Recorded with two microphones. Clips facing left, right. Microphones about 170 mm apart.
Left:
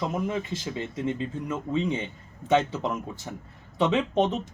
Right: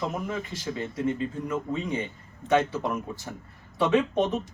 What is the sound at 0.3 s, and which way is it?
Speech, 20° left (ahead or behind).